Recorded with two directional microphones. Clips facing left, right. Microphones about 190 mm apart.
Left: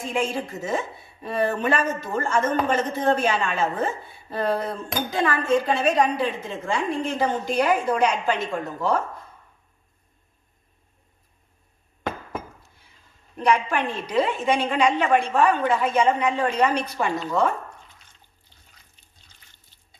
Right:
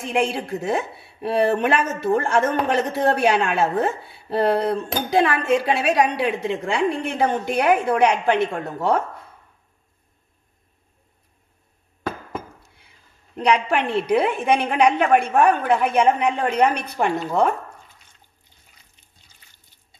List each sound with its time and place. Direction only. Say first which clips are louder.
0.1 s speech: right 4 dB; 75° right (ahead or behind)
13.4 s a woman's voice: right 2 dB; 70° right (ahead or behind)